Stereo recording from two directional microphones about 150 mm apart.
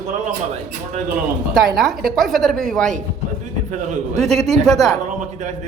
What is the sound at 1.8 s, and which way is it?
A man's voice, centre (ahead or behind).